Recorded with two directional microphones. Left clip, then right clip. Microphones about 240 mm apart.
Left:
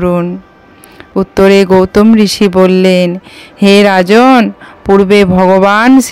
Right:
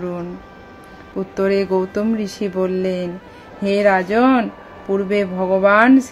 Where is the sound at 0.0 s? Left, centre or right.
Left.